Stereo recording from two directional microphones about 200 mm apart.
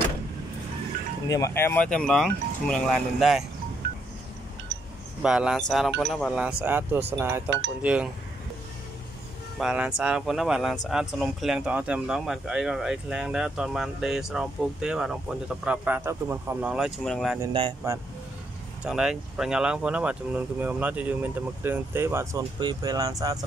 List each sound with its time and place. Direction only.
1.3 s speech: 15° left (ahead or behind)
5.2 s speech: 5° right (ahead or behind)
9.6 s speech: 5° right (ahead or behind)
17.4 s speech: 25° right (ahead or behind)
18.9 s speech: 5° right (ahead or behind)